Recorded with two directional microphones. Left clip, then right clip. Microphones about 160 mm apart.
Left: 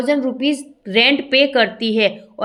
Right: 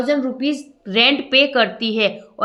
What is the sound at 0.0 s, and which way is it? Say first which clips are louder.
A woman's voice: left 2 dB; 25° left (ahead or behind).